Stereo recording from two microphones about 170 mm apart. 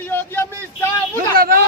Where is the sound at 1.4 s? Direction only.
60° right (ahead or behind).